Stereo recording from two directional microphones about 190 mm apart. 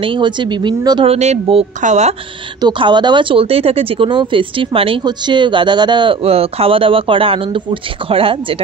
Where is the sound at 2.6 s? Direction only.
25° right (ahead or behind).